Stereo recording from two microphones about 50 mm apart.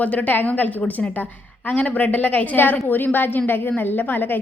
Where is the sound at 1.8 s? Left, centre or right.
Left.